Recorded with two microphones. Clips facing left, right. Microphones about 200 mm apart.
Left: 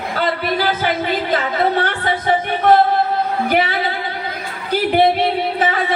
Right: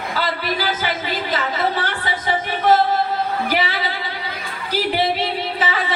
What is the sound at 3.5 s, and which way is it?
Speech, 55° left (ahead or behind).